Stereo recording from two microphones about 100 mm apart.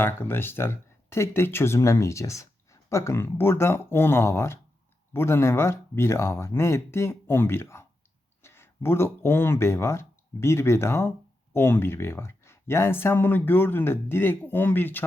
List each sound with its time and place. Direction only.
0.0 s speech: 20° left (ahead or behind)